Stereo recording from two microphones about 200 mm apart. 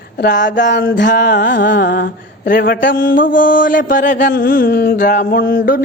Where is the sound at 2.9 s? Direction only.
45° left (ahead or behind).